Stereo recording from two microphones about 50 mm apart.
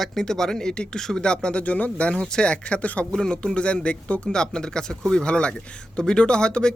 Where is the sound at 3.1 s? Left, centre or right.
Centre.